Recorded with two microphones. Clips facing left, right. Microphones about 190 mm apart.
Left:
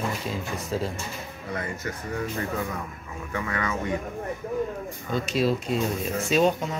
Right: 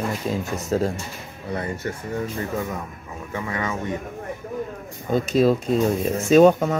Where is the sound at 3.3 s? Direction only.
20° right (ahead or behind).